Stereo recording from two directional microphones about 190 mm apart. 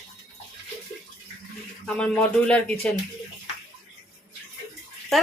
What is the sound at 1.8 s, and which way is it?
Speech, 5° left (ahead or behind).